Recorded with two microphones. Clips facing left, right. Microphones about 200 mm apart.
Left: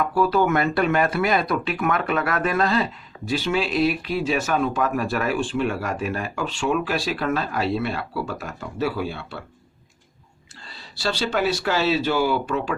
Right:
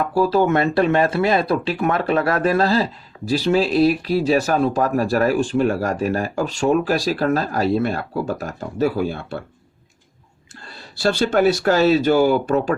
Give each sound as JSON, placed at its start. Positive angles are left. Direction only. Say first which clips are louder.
{"t": 0.0, "sound": "speech", "louder": "right 3 dB", "side_deg": -30}
{"t": 10.6, "sound": "speech", "louder": "right 7 dB", "side_deg": -50}